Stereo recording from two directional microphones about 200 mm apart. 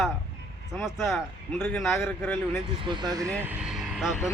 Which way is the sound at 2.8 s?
20° right (ahead or behind).